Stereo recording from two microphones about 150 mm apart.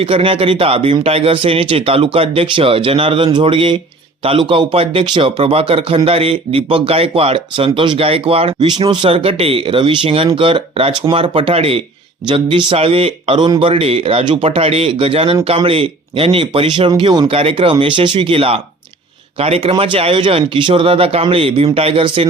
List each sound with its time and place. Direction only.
0.0 s speech: 40° right (ahead or behind)